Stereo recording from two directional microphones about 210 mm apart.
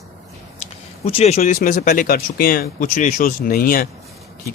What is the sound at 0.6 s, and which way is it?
Speech, 30° left (ahead or behind).